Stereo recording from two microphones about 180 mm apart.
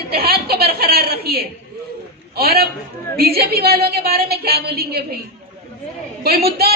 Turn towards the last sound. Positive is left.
turn(degrees=-60)  # may be behind; listen again after turning